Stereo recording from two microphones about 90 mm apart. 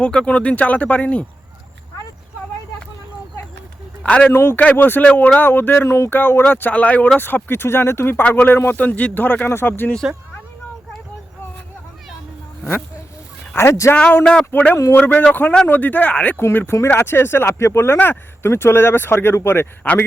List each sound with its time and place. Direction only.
0.0 s speech: 10° left (ahead or behind)
4.0 s speech: 10° left (ahead or behind)
4.3 s speech: 25° left (ahead or behind)
13.5 s speech: 25° left (ahead or behind)
13.9 s speech: 15° left (ahead or behind)